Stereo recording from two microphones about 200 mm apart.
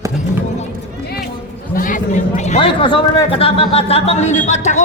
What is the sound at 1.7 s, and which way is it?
A man's voice, 40° left (ahead or behind).